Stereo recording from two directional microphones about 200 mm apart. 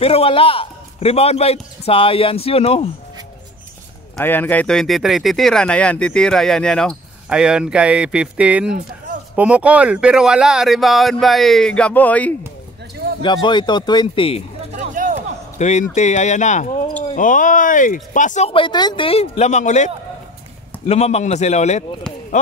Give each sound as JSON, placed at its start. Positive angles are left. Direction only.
{"t": 0.0, "sound": "a man's voice", "side_deg": 30}
{"t": 4.2, "sound": "speech", "side_deg": 10}
{"t": 13.2, "sound": "a man's voice", "side_deg": 25}
{"t": 14.8, "sound": "a sound", "side_deg": -40}
{"t": 15.5, "sound": "speech", "side_deg": 35}